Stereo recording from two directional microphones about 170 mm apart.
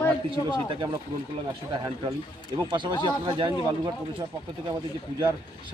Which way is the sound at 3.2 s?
30° right (ahead or behind).